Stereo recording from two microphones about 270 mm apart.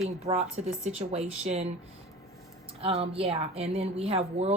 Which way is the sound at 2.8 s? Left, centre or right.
Right.